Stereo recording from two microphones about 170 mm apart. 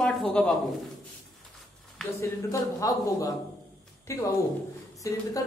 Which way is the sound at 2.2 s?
20° left (ahead or behind).